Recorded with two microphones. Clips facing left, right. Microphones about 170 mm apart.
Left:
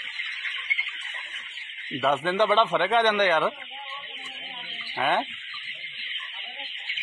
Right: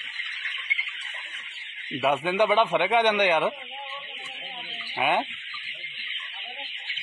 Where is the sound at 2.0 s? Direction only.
10° right (ahead or behind).